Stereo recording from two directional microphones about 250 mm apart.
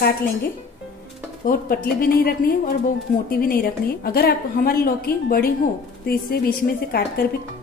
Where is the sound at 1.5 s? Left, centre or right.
Left.